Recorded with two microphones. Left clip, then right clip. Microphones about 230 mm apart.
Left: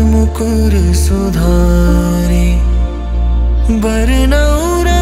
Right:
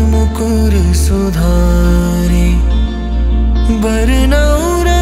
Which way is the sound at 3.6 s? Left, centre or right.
Centre.